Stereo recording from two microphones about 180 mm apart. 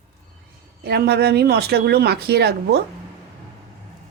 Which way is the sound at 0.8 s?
65° right (ahead or behind).